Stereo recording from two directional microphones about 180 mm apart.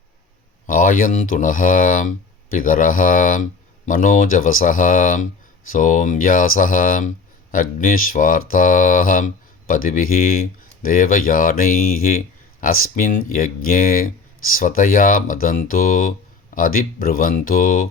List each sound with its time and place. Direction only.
0.7 s speech: 50° left (ahead or behind)